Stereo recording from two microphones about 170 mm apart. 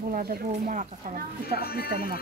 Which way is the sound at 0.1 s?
55° right (ahead or behind).